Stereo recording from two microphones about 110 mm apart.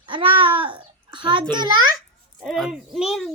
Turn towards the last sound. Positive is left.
turn(degrees=-5)  # may be behind; listen again after turning